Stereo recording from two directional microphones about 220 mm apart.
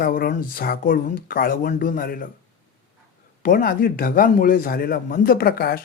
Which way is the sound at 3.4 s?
40° left (ahead or behind).